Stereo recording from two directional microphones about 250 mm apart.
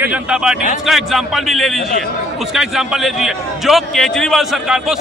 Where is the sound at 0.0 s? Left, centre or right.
Centre.